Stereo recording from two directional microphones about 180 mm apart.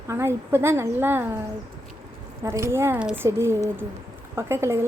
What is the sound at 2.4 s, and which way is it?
Speech, 15° right (ahead or behind).